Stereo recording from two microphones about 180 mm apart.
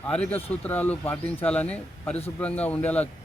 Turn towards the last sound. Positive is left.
turn(degrees=10)  # may be behind; listen again after turning